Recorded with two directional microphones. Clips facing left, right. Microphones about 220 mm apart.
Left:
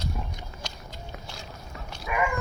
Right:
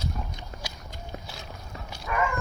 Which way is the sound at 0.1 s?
10° left (ahead or behind).